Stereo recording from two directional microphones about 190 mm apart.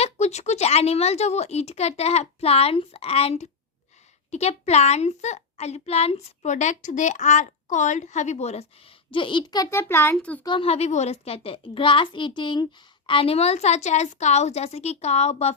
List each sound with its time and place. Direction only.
0.0 s a woman's voice: 35° left (ahead or behind); by 10.4 s 10° left (ahead or behind)
10.4 s a child's voice: 25° left (ahead or behind)